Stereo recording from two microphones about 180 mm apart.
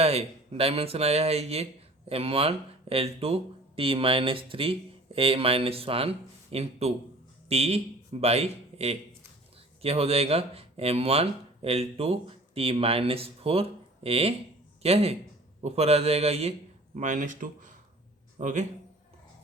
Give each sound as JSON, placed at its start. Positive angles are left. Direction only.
{"t": 0.0, "sound": "a man's voice", "side_deg": -35}